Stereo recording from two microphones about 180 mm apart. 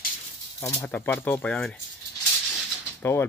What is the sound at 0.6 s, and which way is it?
Speech, 15° left (ahead or behind).